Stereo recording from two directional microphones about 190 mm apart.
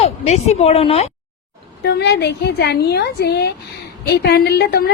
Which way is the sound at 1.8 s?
60° left (ahead or behind).